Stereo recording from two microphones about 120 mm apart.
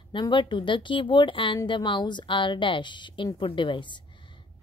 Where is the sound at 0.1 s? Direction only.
40° left (ahead or behind).